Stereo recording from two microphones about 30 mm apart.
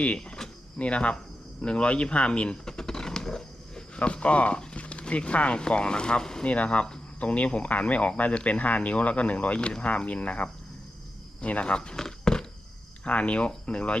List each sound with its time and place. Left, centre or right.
0.0 s speech: left
2.6 s creak: left
4.0 s speech: left
5.7 s speech: left
6.4 s speech: left
9.6 s speech: left
10.1 s speech: left
11.6 s speech: left
11.9 s walk: left
13.1 s speech: left